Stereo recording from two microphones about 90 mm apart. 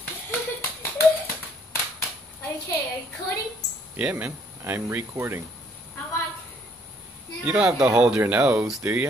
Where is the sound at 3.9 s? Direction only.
15° right (ahead or behind).